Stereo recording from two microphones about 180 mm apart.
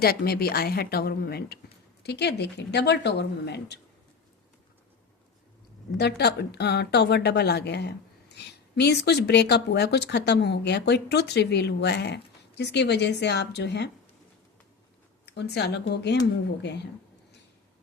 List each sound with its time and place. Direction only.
0.0 s a woman's voice: 60° left (ahead or behind)
6.0 s speech: 65° left (ahead or behind)
15.3 s speech: 70° left (ahead or behind)